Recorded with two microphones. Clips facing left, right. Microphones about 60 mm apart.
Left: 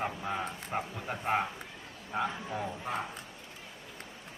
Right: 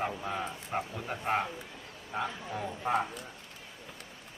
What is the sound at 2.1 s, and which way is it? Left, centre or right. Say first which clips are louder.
Speech: left 2 dB; centre.